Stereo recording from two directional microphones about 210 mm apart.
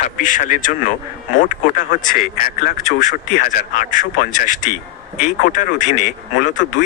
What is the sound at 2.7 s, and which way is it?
Speech, 40° left (ahead or behind).